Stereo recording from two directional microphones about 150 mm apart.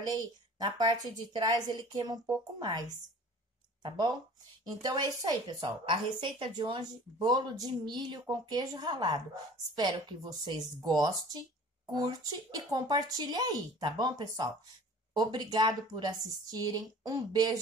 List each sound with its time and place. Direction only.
0.0 s a woman's voice: 30° right (ahead or behind)
3.8 s a woman's voice: 30° right (ahead or behind)